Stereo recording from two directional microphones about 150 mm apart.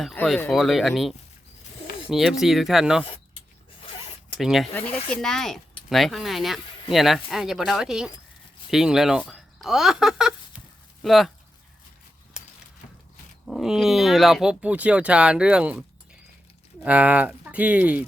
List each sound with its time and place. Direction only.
0.0 s speech: centre (ahead or behind)
3.8 s zipper: 40° left (ahead or behind)
4.4 s speech: centre (ahead or behind)
12.4 s a sound: 5° right (ahead or behind)
13.4 s speech: centre (ahead or behind)
16.8 s speech: 10° right (ahead or behind)